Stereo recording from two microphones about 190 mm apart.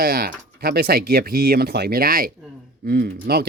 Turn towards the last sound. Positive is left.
turn(degrees=-55)  # may be behind; listen again after turning